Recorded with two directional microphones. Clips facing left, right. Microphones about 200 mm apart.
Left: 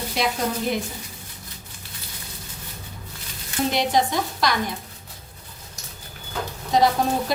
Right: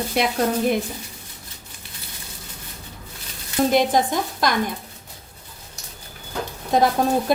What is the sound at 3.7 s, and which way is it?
Speech, 50° right (ahead or behind).